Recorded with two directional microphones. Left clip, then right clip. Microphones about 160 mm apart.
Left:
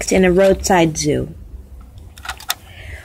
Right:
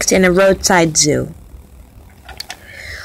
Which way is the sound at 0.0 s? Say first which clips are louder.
Right 2 dB; 10° right (ahead or behind).